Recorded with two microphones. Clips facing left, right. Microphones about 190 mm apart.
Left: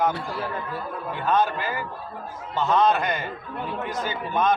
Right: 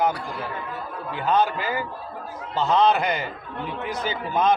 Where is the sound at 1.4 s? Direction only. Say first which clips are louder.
Right 2 dB; 15° right (ahead or behind).